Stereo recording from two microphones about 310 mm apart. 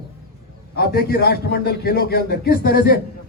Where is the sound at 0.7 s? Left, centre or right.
Left.